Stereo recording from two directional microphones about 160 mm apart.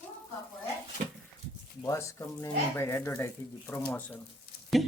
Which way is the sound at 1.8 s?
15° left (ahead or behind).